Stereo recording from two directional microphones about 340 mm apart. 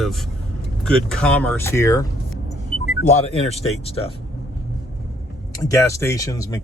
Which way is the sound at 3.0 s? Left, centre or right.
Centre.